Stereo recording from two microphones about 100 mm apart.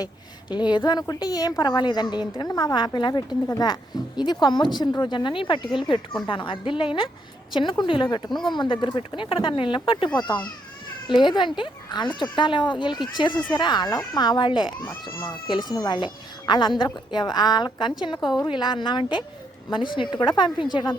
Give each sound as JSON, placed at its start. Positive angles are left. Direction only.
{"t": 0.7, "sound": "a woman's voice", "side_deg": 45}